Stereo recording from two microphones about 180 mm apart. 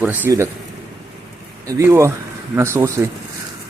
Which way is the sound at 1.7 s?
15° right (ahead or behind).